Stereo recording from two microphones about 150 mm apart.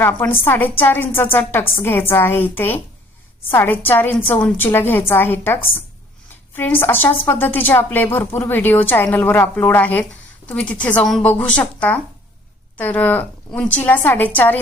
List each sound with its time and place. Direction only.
0.0 s a woman's voice: 10° left (ahead or behind)
6.6 s a woman's voice: 15° left (ahead or behind)